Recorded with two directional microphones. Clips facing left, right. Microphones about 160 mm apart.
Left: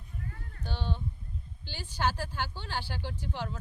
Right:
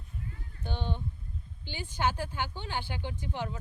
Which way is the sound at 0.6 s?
15° right (ahead or behind).